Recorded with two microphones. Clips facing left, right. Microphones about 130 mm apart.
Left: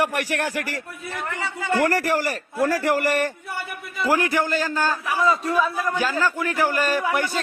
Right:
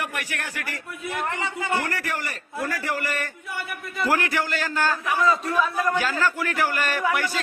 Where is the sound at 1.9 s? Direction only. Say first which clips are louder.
Left 8 dB; 40° left (ahead or behind).